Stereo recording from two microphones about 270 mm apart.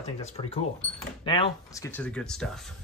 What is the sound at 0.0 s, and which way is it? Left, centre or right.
Speech, left.